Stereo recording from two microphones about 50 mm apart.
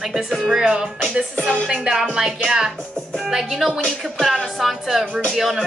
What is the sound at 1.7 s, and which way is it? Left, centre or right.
Speech, centre.